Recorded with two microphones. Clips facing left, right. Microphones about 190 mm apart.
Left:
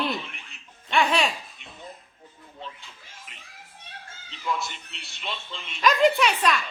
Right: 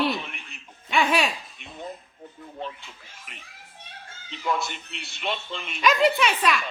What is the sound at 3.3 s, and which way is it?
Speech, 65° right (ahead or behind).